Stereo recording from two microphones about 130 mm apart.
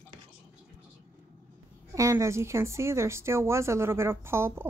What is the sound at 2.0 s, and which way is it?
Speech, 25° right (ahead or behind).